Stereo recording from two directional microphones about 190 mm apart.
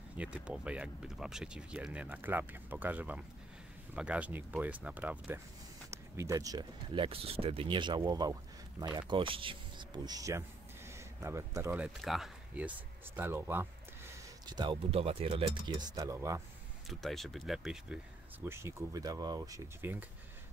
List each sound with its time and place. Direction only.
0.2 s speech: 5° right (ahead or behind)
14.4 s speech: 25° right (ahead or behind)
17.0 s speech: centre (ahead or behind)